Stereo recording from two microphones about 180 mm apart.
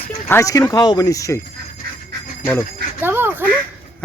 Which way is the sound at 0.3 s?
15° left (ahead or behind).